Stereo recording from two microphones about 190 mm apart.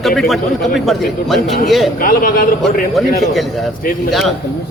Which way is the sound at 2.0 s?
45° left (ahead or behind).